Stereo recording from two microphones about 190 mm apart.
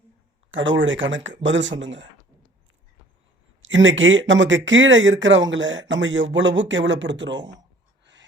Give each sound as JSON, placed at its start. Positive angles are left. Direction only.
{"t": 0.5, "sound": "speech", "side_deg": -80}
{"t": 3.6, "sound": "speech", "side_deg": -90}